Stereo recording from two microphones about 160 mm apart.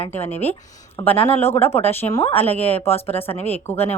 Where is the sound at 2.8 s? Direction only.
40° left (ahead or behind).